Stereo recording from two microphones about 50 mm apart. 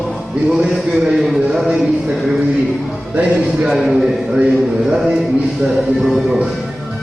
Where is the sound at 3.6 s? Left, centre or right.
Centre.